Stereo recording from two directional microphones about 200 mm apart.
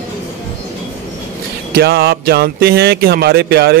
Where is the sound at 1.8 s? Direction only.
50° right (ahead or behind).